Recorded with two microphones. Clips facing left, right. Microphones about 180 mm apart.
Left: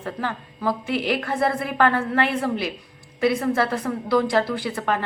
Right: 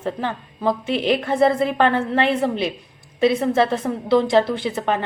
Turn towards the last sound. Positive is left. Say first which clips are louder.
# right 3 dB
turn(degrees=-20)  # may be behind; listen again after turning